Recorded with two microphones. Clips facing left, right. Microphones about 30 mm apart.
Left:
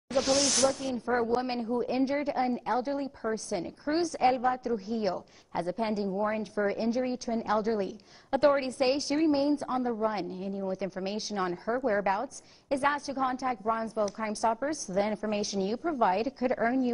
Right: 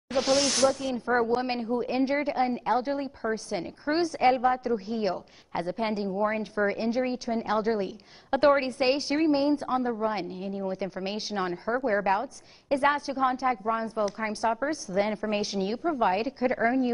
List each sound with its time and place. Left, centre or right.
0.1 s a woman's voice: right
0.8 s speech: right
1.1 s a man's voice: centre
1.4 s a woman's voice: right